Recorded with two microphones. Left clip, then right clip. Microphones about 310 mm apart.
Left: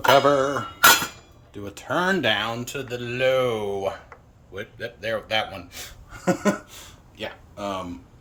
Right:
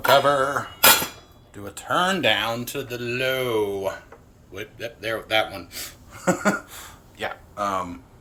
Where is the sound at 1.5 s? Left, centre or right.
Left.